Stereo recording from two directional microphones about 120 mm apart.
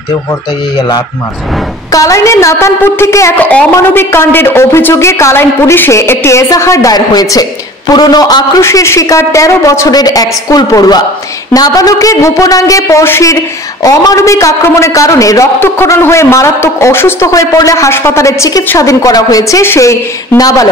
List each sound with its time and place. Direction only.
1.9 s a man's voice: 30° left (ahead or behind)
3.3 s a man's voice: 15° left (ahead or behind); by 8.5 s 35° left (ahead or behind)
8.5 s a man's voice: 20° left (ahead or behind)